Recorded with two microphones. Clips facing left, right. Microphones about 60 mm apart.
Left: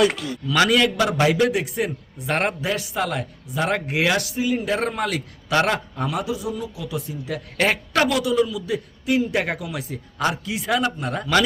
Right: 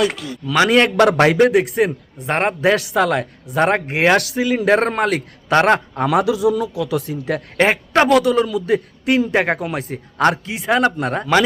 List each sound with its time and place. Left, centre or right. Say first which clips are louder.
0.0 s a man's voice: even; centre
0.5 s a man's voice: right 3 dB; right
0.8 s speech: right 6 dB; right
2.1 s a man's voice: right 3 dB; right
2.6 s speech: right 9 dB; right
4.2 s a man's voice: right 5 dB; right
6.1 s a man's voice: right 11 dB; right
8.1 s a man's voice: right 6 dB; right
9.3 s a man's voice: right 6 dB; right
10.4 s a man's voice: right 5 dB; right